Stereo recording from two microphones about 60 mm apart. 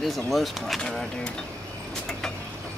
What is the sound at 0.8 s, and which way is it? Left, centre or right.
Speech, centre.